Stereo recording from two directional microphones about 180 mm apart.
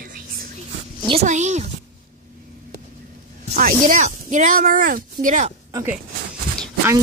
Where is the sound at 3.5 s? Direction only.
50° right (ahead or behind).